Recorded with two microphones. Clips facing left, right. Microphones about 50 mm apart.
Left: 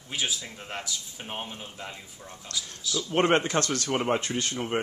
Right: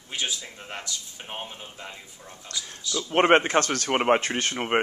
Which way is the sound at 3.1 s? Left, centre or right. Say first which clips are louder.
Right 4 dB; right.